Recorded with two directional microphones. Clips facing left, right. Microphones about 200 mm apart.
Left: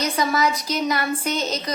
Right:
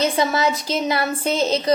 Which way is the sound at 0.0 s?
25° right (ahead or behind).